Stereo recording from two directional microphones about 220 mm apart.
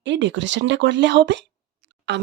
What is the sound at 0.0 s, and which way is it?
Speech, 55° right (ahead or behind).